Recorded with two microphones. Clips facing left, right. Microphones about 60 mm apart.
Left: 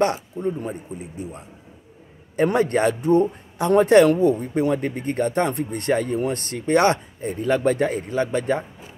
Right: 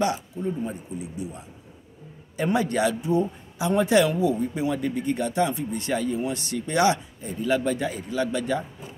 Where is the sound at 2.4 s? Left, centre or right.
Left.